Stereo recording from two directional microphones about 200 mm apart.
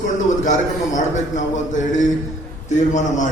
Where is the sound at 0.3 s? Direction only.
35° left (ahead or behind).